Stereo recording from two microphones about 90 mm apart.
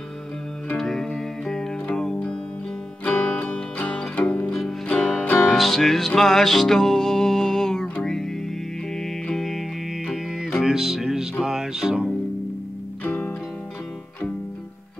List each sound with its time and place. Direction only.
0.7 s music: 5° left (ahead or behind)
4.6 s music: 5° left (ahead or behind)
13.0 s music: 20° left (ahead or behind)